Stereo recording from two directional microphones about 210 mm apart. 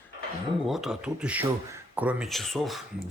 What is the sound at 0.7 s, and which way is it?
Speech, centre (ahead or behind).